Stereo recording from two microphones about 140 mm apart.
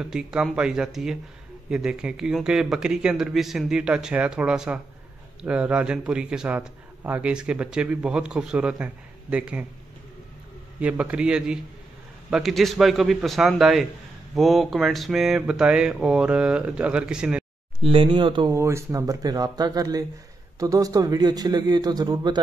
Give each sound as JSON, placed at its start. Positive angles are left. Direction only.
{"t": 0.0, "sound": "a man's voice", "side_deg": -5}
{"t": 10.8, "sound": "a man's voice", "side_deg": -10}
{"t": 17.8, "sound": "speech", "side_deg": -40}
{"t": 18.5, "sound": "a man's voice", "side_deg": -20}